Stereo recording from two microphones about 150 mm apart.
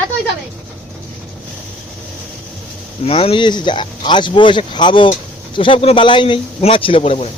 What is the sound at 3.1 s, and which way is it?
Speech, 40° left (ahead or behind).